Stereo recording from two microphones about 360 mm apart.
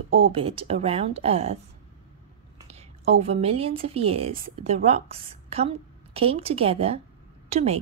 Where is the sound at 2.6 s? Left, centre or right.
Centre.